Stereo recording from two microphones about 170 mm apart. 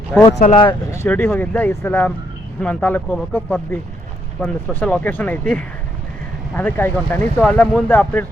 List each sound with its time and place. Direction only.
0.3 s speech: 40° left (ahead or behind)
0.5 s speech: 25° left (ahead or behind); by 8.3 s 10° left (ahead or behind)